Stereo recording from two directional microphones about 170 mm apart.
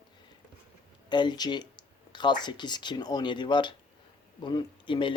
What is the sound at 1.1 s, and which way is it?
Speech, 25° left (ahead or behind).